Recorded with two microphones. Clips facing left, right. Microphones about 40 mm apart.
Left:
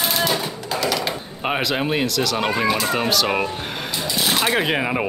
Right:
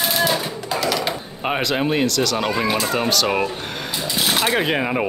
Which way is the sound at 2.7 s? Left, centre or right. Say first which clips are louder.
Even; centre.